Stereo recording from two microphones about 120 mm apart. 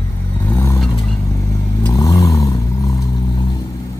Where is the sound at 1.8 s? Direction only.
30° left (ahead or behind).